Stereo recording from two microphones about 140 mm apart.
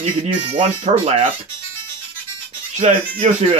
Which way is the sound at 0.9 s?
55° right (ahead or behind).